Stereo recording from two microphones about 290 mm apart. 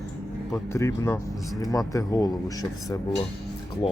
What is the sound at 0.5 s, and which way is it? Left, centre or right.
Speech, centre.